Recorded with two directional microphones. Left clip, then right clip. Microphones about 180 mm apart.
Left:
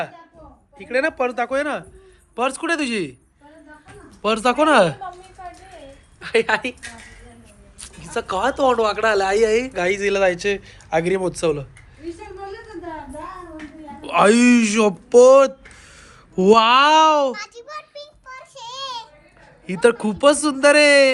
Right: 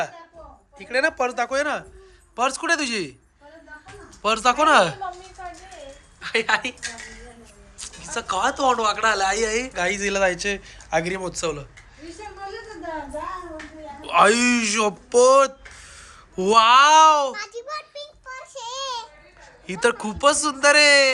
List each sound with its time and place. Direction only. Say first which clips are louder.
0.8 s a woman's voice: left 1 dB; 10° right (ahead or behind)
4.2 s speech: left 1 dB; centre (ahead or behind)
6.1 s a woman's voice: left 3 dB; 5° left (ahead or behind)
7.8 s speech: left 3 dB; 5° left (ahead or behind)
14.0 s speech: left 2 dB; centre (ahead or behind)
17.3 s a sound: right 2 dB; 45° right (ahead or behind)
19.6 s speech: left 5 dB; 5° right (ahead or behind)